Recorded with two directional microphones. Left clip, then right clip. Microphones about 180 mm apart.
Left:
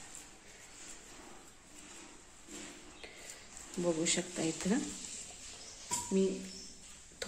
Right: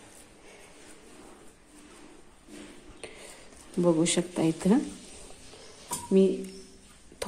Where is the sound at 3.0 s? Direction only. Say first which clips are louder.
Right 9 dB; 40° right (ahead or behind).